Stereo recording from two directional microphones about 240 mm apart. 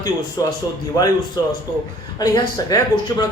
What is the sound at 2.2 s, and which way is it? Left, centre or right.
Speech, centre.